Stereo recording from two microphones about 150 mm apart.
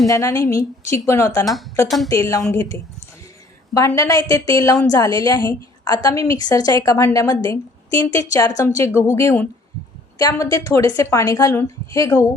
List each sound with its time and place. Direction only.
0.1 s a woman's voice: 20° left (ahead or behind)
3.8 s a woman's voice: 20° left (ahead or behind)